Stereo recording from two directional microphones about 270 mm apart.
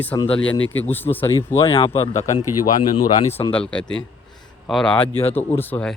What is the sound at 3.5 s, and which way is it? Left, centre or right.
Speech, centre.